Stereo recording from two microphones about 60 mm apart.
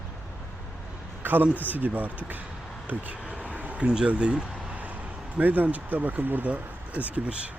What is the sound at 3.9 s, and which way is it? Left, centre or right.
Speech, centre.